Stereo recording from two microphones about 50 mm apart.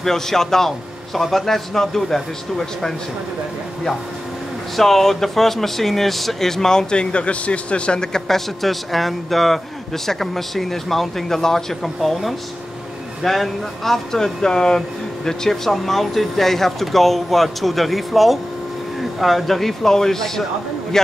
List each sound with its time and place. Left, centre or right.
0.0 s speech: centre
4.7 s speech: centre